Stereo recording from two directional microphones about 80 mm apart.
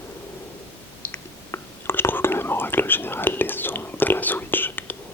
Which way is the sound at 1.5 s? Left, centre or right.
Left.